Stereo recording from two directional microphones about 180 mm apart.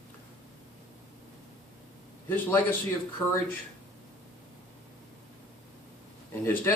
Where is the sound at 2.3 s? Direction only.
10° left (ahead or behind).